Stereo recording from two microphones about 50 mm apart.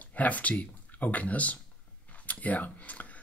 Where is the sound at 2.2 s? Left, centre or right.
Left.